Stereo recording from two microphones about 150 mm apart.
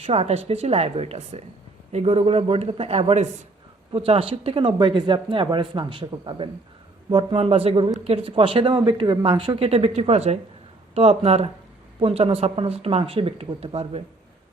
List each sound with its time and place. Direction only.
0.0 s speech: 45° right (ahead or behind)
3.9 s speech: 40° right (ahead or behind)
9.6 s speech: 40° right (ahead or behind)